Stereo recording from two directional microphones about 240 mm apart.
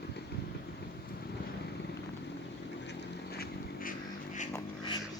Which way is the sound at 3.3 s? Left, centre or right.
Left.